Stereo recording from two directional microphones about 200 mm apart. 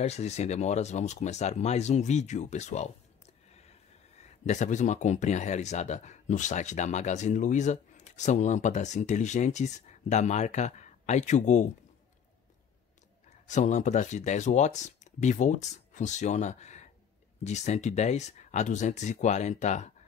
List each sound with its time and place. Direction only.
0.0 s speech: 35° left (ahead or behind)
4.2 s speech: 35° left (ahead or behind)
13.5 s speech: 35° left (ahead or behind)